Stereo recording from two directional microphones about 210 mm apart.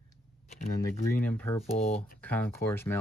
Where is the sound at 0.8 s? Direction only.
10° left (ahead or behind).